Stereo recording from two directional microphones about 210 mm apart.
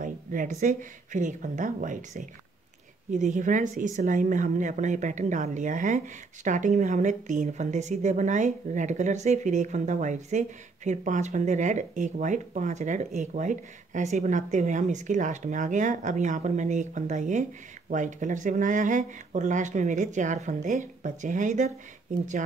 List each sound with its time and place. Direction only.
0.0 s speech: 40° right (ahead or behind)